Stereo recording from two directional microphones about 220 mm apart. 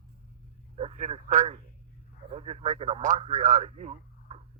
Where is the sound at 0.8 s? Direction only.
30° right (ahead or behind).